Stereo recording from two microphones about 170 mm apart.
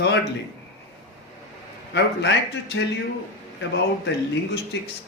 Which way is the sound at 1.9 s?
90° left.